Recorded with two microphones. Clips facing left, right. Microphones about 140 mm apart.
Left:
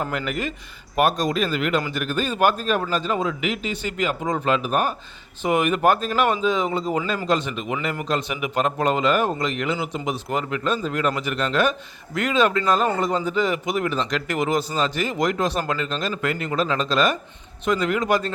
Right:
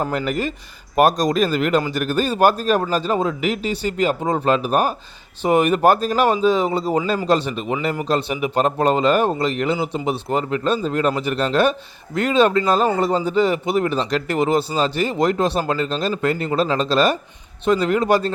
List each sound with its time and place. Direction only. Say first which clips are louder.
0.0 s speech: right 4 dB; 35° right (ahead or behind)